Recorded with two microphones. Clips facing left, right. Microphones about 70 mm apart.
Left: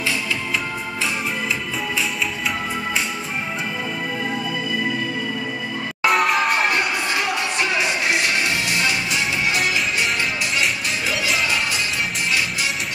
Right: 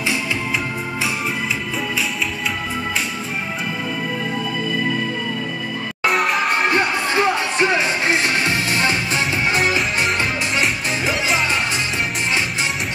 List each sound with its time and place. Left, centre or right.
6.0 s music: centre
6.7 s music: right